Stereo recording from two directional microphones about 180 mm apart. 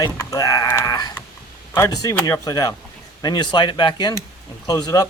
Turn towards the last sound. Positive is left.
turn(degrees=20)  # may be behind; listen again after turning